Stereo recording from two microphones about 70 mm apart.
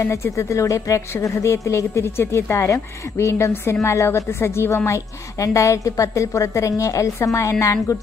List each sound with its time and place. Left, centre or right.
0.0 s a woman's voice: left